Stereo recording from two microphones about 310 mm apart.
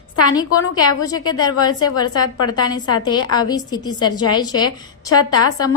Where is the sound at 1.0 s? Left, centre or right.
Centre.